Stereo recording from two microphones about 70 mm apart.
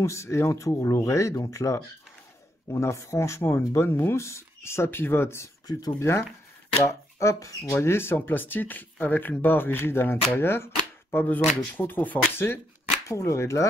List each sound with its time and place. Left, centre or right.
0.0 s speech: left
5.7 s speech: left
5.9 s speech: left
7.7 s speech: left
13.1 s speech: left